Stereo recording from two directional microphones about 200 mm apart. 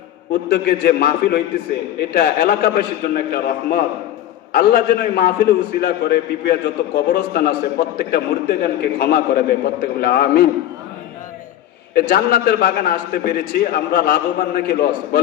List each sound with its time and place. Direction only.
0.4 s a man's voice: 55° left (ahead or behind)
11.9 s a man's voice: 50° left (ahead or behind)